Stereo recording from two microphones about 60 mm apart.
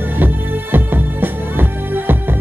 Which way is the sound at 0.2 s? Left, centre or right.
Right.